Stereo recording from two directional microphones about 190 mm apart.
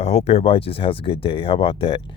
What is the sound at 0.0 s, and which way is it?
Speech, 35° left (ahead or behind).